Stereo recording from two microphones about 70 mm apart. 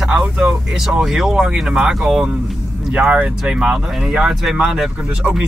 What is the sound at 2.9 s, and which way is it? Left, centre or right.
Speech, centre.